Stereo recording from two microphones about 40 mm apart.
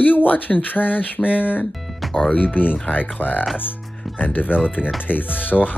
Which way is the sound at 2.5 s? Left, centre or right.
Left.